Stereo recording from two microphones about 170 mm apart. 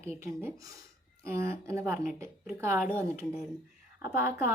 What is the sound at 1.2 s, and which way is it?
Speech, 15° right (ahead or behind).